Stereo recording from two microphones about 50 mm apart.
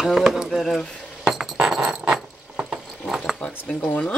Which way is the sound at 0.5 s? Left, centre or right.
Centre.